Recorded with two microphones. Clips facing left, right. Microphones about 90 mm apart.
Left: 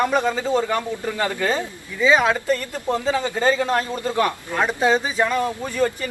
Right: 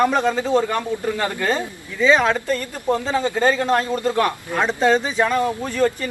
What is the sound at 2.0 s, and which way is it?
Speech, 5° left (ahead or behind).